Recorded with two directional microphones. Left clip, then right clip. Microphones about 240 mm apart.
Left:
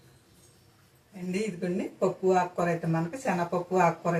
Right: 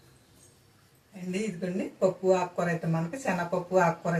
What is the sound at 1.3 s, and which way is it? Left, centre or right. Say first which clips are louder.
Speech: left 1 dB; centre.